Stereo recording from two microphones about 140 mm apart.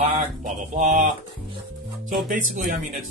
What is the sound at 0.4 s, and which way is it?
Speech, 65° right (ahead or behind).